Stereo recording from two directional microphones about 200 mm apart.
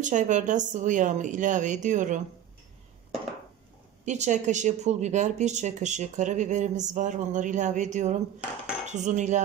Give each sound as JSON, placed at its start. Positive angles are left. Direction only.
{"t": 0.0, "sound": "speech", "side_deg": -40}
{"t": 4.0, "sound": "speech", "side_deg": -35}
{"t": 8.8, "sound": "cutlery", "side_deg": -35}